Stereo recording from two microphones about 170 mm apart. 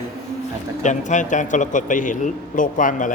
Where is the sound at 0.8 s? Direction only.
45° left (ahead or behind).